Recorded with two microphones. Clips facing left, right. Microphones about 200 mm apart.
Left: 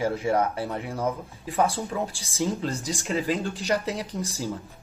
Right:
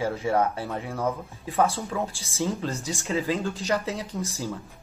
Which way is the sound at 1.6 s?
15° left (ahead or behind).